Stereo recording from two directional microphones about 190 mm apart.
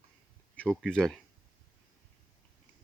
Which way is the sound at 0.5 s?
5° left (ahead or behind).